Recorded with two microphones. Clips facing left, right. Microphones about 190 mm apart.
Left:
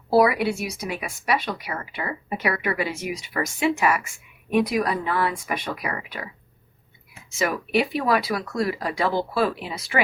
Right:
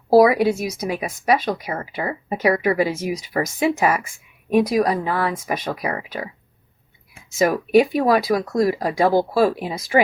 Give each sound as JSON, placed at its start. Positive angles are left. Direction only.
{"t": 0.1, "sound": "speech", "side_deg": -40}
{"t": 7.1, "sound": "speech", "side_deg": -45}
{"t": 9.9, "sound": "speech", "side_deg": -30}